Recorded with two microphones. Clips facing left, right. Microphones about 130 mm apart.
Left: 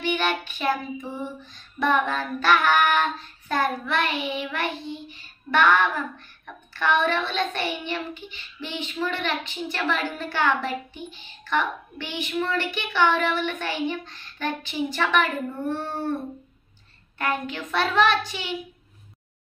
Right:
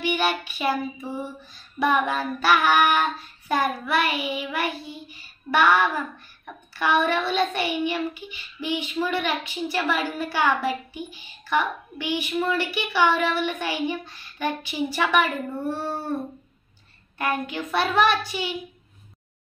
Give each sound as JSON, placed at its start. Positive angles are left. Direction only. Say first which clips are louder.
{"t": 0.0, "sound": "child singing", "louder": "right 1 dB", "side_deg": -10}
{"t": 1.1, "sound": "female singing", "louder": "right 1 dB", "side_deg": -10}
{"t": 17.2, "sound": "female singing", "louder": "right 1 dB", "side_deg": -15}